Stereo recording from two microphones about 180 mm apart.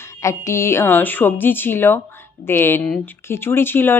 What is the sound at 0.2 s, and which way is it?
A woman's voice, 15° left (ahead or behind).